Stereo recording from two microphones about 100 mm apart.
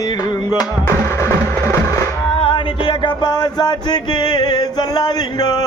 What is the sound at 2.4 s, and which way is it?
Music, 55° left (ahead or behind).